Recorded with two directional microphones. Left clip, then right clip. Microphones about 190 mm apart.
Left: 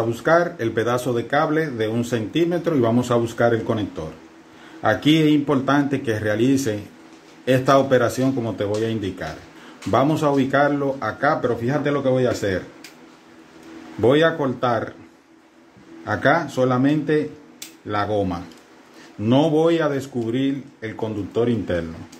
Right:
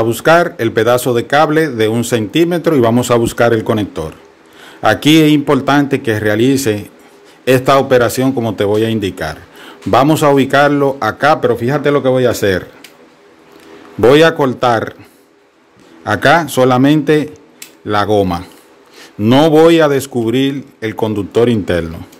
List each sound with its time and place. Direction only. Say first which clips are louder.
0.1 s speech: right 7 dB; 55° right (ahead or behind)
14.0 s speech: right 9 dB; 55° right (ahead or behind)
16.0 s speech: right 9 dB; 60° right (ahead or behind)